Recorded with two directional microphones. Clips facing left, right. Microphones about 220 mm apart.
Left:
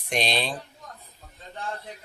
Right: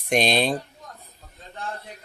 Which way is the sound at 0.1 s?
45° right (ahead or behind).